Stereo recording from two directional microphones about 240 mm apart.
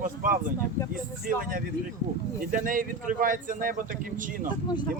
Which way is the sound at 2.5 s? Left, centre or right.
Right.